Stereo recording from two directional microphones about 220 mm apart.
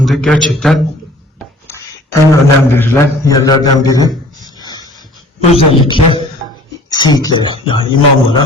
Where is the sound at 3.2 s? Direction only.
15° left (ahead or behind).